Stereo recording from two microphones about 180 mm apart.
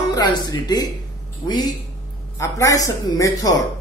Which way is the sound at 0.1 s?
20° left (ahead or behind).